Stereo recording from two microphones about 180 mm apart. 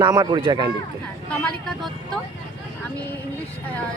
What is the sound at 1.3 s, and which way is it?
Speech, centre (ahead or behind).